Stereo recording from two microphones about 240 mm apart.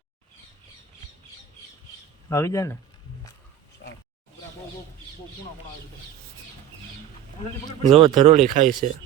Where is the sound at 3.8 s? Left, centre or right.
Left.